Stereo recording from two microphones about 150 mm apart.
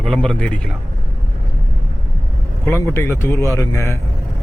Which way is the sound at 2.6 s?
15° left (ahead or behind).